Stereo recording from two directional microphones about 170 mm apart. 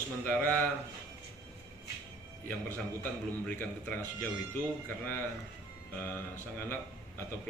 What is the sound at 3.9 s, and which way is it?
Speech, 10° left (ahead or behind).